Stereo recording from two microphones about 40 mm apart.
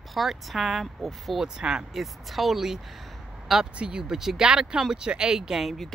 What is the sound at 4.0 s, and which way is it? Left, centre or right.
Speech, centre.